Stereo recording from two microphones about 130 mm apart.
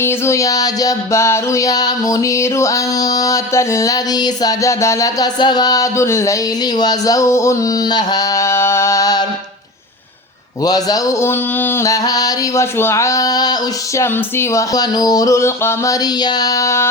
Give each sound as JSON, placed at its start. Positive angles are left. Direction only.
{"t": 0.0, "sound": "music", "side_deg": 20}
{"t": 10.6, "sound": "music", "side_deg": 30}